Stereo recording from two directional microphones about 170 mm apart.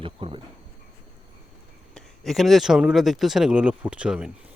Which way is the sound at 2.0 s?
Centre (ahead or behind).